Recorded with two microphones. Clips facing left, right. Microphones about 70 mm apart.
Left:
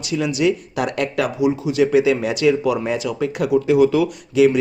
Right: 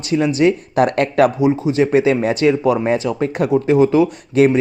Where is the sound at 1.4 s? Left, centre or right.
Right.